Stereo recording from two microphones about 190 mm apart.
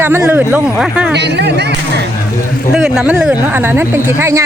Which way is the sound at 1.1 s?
65° right (ahead or behind).